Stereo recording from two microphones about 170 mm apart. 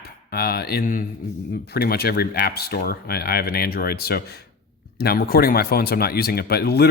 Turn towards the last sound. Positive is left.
turn(degrees=70)  # may be behind; listen again after turning